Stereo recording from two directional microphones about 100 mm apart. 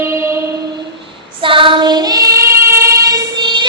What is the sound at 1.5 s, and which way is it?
Child singing, 55° right (ahead or behind).